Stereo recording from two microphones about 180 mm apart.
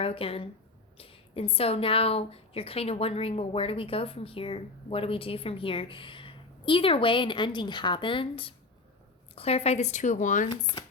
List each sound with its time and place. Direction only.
0.0 s a woman's voice: 30° left (ahead or behind)
10.5 s speech: 25° left (ahead or behind)